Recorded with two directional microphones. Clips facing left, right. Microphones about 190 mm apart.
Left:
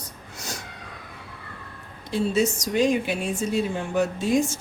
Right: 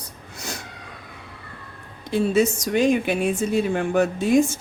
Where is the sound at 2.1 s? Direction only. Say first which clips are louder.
Right 3 dB; 55° right (ahead or behind).